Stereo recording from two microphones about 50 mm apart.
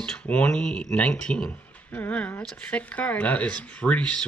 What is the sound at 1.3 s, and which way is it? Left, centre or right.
Speech, left.